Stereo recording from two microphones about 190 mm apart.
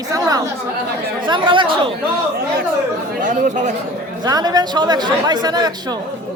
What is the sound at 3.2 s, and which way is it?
Speech, 40° right (ahead or behind).